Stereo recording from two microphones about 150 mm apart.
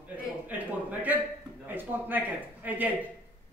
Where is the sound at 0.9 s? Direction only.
10° right (ahead or behind).